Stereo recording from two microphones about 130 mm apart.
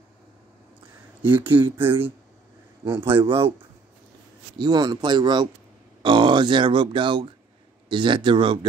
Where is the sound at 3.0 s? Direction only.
40° right (ahead or behind).